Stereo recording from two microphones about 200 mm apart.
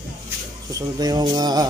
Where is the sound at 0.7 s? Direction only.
20° right (ahead or behind).